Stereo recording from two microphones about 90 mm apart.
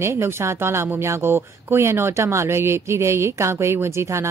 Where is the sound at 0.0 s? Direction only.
30° right (ahead or behind).